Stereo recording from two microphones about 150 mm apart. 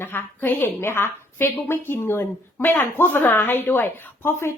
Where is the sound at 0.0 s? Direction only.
15° left (ahead or behind).